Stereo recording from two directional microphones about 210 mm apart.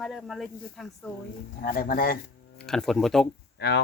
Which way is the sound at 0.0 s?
Centre (ahead or behind).